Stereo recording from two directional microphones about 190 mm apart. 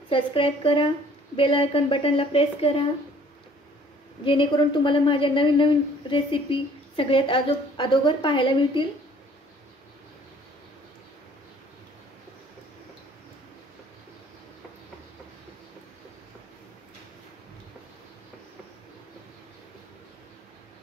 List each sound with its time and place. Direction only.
0.1 s a woman's voice: 30° left (ahead or behind)
4.2 s a woman's voice: 25° left (ahead or behind)